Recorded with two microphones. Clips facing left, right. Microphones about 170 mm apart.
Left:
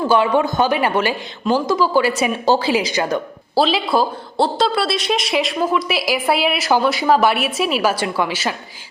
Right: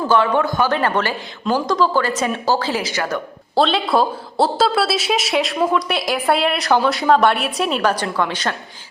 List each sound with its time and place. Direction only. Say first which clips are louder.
0.1 s speech: even; 15° left (ahead or behind)
3.5 s speech: even; centre (ahead or behind)